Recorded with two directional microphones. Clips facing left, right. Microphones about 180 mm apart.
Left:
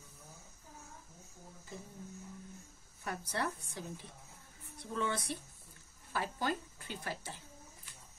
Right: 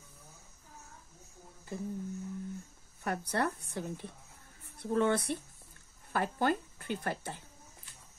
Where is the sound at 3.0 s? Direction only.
60° right (ahead or behind).